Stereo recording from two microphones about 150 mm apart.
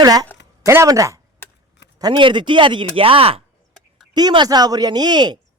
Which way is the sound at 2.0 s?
30° right (ahead or behind).